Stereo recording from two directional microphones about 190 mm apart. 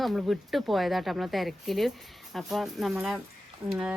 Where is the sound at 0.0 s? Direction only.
Centre (ahead or behind).